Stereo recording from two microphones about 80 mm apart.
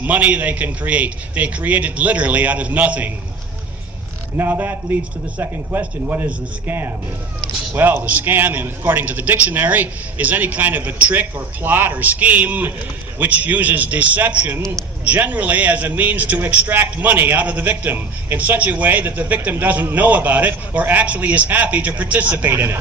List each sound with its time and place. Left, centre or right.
0.0 s a man's voice: centre
4.4 s a man's voice: right